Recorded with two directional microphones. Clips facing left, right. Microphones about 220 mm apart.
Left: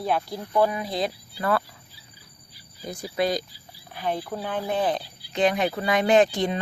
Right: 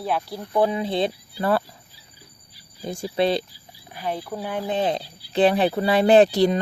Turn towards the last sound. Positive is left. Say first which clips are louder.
# right 5 dB
turn(degrees=-40)  # may be behind; listen again after turning